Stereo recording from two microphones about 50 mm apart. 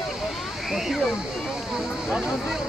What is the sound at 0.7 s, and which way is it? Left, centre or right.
Speech, centre.